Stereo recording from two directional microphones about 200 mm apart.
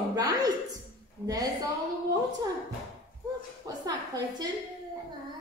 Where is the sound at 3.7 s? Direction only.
20° right (ahead or behind).